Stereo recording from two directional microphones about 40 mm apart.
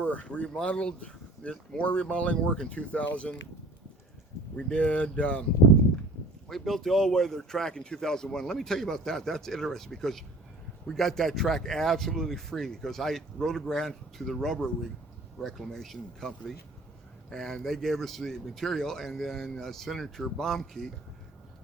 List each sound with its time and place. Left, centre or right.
0.0 s a sound: left
0.3 s speech: left
4.5 s speech: left
6.5 s speech: centre
16.2 s speech: centre